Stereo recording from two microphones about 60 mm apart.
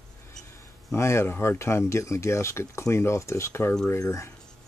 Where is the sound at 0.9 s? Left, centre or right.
Left.